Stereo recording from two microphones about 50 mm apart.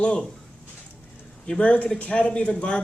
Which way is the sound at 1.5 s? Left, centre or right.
Left.